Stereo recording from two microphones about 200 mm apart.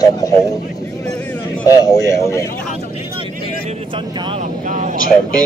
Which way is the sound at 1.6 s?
20° left (ahead or behind).